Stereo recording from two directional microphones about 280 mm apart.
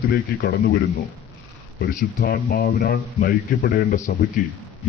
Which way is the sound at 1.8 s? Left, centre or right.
Left.